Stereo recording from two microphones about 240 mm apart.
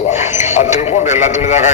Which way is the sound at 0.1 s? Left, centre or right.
Left.